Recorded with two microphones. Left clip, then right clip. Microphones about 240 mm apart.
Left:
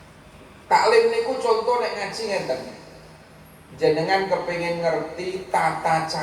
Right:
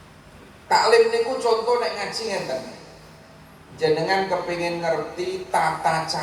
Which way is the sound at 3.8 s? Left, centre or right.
Right.